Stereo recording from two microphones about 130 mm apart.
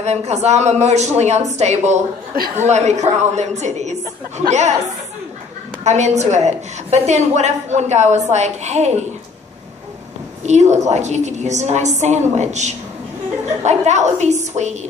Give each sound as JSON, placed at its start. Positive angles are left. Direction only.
{"t": 0.0, "sound": "a woman's voice", "side_deg": -55}
{"t": 5.9, "sound": "a woman's voice", "side_deg": -60}
{"t": 10.4, "sound": "a woman's voice", "side_deg": -60}